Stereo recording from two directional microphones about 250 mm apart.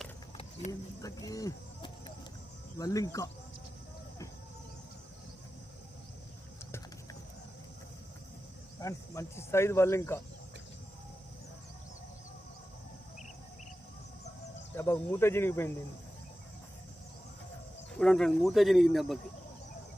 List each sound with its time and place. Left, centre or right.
0.7 s speech: centre
6.7 s a sound: centre
8.8 s speech: centre
14.8 s speech: centre
18.0 s speech: centre